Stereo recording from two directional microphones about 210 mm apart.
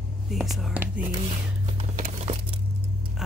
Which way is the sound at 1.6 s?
30° right (ahead or behind).